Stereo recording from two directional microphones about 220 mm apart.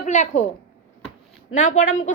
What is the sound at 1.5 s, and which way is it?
Speech, 35° left (ahead or behind).